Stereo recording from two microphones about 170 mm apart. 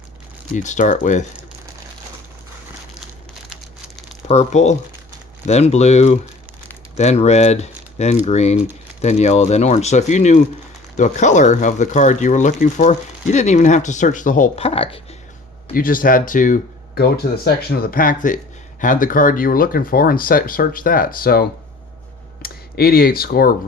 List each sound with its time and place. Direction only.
0.5 s speech: 45° left (ahead or behind)
4.3 s speech: 40° left (ahead or behind)
14.5 s a sound: 35° left (ahead or behind)
15.7 s speech: 55° left (ahead or behind)
22.4 s speech: 65° left (ahead or behind)